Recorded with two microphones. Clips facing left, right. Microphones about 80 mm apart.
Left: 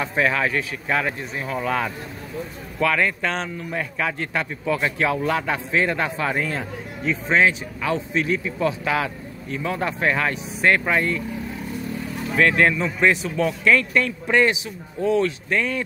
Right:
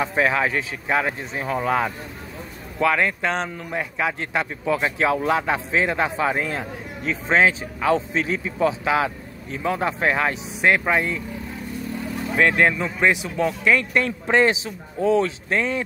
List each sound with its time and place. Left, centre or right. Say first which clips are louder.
0.0 s speech: right 1 dB; right
7.1 s speech: even; right
12.4 s speech: even; centre